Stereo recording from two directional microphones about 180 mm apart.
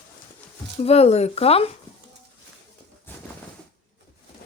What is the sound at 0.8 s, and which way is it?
Speech, 35° left (ahead or behind).